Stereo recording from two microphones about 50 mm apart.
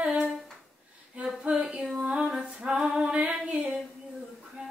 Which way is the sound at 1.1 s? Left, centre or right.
Centre.